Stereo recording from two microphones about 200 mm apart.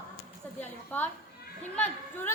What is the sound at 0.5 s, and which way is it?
Speech, 10° left (ahead or behind).